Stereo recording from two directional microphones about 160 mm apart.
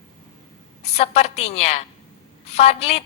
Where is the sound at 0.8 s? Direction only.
40° left (ahead or behind).